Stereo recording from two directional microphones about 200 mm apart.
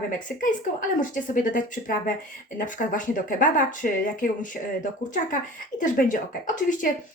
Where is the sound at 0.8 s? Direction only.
40° left (ahead or behind).